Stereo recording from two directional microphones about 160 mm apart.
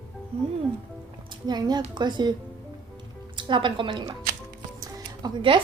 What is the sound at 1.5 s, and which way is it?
Speech, 25° right (ahead or behind).